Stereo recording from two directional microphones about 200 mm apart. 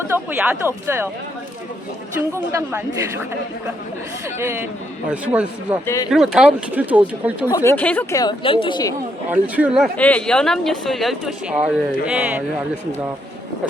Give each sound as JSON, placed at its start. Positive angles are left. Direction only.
{"t": 0.0, "sound": "speech", "side_deg": -10}
{"t": 2.5, "sound": "speech", "side_deg": -10}
{"t": 4.4, "sound": "speech", "side_deg": -10}
{"t": 5.8, "sound": "speech", "side_deg": 15}
{"t": 6.1, "sound": "speech", "side_deg": -5}
{"t": 7.5, "sound": "speech", "side_deg": 10}
{"t": 8.2, "sound": "speech", "side_deg": 25}
{"t": 9.3, "sound": "speech", "side_deg": -5}